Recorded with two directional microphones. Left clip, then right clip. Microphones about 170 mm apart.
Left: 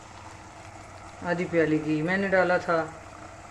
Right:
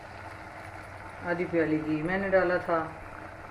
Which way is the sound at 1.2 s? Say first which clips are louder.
Left 3 dB; 60° left (ahead or behind).